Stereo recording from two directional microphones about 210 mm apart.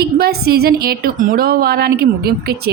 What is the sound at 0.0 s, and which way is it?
A woman's voice, 50° right (ahead or behind).